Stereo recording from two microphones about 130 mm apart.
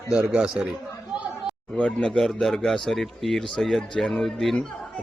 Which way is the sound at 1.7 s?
5° left (ahead or behind).